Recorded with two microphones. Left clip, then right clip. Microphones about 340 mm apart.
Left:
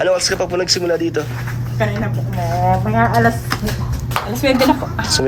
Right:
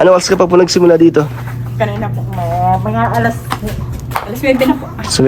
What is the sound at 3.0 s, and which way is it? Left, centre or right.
Speech, centre.